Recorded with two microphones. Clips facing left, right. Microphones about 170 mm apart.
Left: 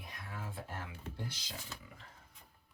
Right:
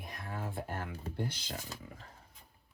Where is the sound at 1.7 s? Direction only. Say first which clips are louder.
Right 4 dB; 40° right (ahead or behind).